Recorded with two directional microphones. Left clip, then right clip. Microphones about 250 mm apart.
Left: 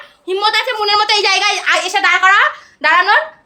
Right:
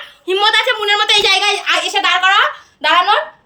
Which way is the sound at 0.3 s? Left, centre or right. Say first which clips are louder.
Right 2 dB; centre.